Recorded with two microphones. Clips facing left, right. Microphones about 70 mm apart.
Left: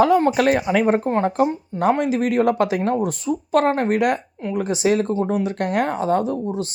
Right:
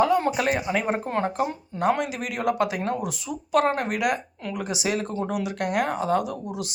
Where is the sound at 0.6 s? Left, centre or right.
Left.